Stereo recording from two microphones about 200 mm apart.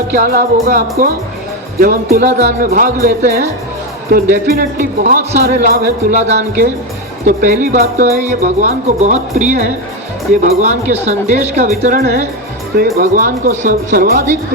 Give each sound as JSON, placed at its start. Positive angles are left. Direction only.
{"t": 0.2, "sound": "speech", "side_deg": -50}
{"t": 6.1, "sound": "speech", "side_deg": -35}